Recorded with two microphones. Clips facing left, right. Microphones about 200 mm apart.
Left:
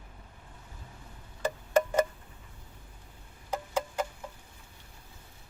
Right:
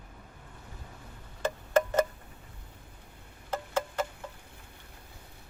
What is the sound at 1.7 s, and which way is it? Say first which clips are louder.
Wind chime: even; 10° left (ahead or behind).